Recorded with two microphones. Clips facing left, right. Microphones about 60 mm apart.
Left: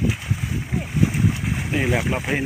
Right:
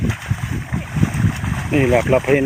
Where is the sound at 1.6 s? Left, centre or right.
Right.